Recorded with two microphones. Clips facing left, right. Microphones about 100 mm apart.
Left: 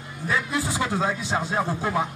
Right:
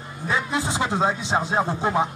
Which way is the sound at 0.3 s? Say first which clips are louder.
Right 1 dB; 25° right (ahead or behind).